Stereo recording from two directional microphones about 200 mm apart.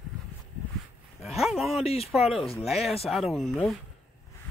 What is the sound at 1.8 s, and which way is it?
Speech, 30° left (ahead or behind).